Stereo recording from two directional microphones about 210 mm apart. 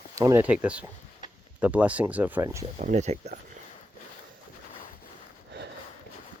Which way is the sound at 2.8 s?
35° right (ahead or behind).